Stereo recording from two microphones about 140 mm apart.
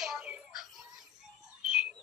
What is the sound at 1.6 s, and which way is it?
Bird, 5° right (ahead or behind).